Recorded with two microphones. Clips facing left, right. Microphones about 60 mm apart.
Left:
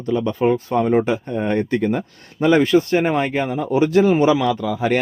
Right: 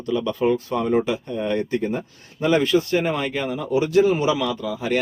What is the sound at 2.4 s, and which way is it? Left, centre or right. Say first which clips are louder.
Speech: left 4 dB; left.